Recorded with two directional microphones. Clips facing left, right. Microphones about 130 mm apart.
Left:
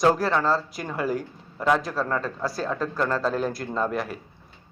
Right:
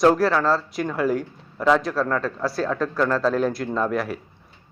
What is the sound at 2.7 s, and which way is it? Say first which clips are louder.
Speech: right 3 dB; 30° left (ahead or behind).